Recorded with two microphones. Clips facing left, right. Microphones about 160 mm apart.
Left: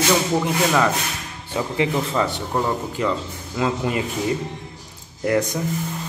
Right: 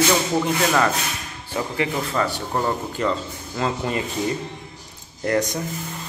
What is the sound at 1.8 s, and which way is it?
Speech, 20° left (ahead or behind).